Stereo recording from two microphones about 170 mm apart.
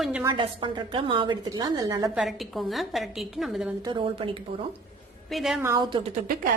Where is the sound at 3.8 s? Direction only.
30° right (ahead or behind).